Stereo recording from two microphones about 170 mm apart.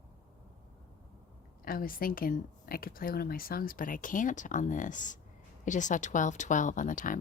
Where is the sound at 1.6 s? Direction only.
55° left (ahead or behind).